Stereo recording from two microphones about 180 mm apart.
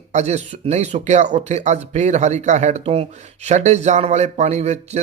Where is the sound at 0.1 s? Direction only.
40° right (ahead or behind).